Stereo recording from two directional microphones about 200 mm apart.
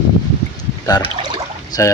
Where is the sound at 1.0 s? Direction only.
25° right (ahead or behind).